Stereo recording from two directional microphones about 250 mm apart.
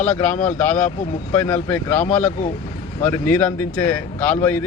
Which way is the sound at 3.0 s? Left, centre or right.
Centre.